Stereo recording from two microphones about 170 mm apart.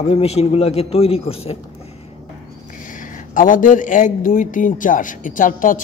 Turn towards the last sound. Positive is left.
turn(degrees=50)  # may be behind; listen again after turning